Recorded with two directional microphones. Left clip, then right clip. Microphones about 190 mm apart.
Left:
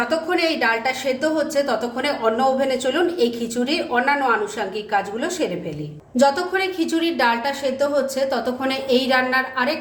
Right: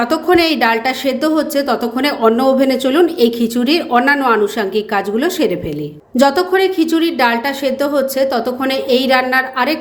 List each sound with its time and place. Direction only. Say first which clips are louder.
0.1 s a woman's voice: right 7 dB; 50° right (ahead or behind)